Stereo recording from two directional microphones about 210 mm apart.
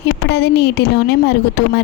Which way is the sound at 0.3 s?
50° left (ahead or behind).